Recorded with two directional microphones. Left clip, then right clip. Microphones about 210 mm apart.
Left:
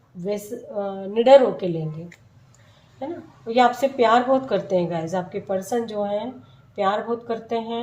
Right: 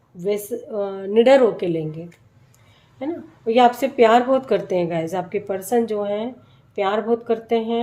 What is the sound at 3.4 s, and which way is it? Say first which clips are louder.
A woman's voice: right 3 dB; 50° right (ahead or behind).